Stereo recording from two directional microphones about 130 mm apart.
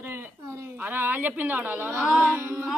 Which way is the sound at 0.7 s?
15° right (ahead or behind).